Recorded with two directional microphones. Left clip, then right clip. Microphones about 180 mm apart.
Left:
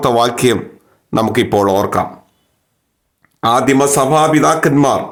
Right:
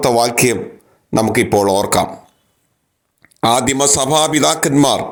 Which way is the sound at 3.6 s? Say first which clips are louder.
Left 3 dB; 25° right (ahead or behind).